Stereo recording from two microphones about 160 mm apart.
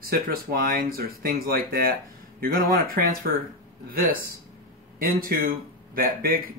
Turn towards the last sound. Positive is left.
turn(degrees=-65)  # may be behind; listen again after turning